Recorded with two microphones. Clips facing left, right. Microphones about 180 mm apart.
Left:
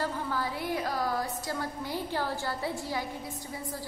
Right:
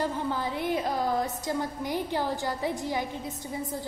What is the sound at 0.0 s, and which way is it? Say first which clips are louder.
A woman's voice: right 3 dB; 20° right (ahead or behind).